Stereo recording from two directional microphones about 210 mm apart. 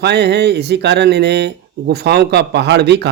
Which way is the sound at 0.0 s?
50° right (ahead or behind).